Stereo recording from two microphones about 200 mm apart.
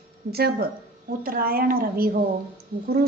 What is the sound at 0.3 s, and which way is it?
A woman's voice, 50° right (ahead or behind).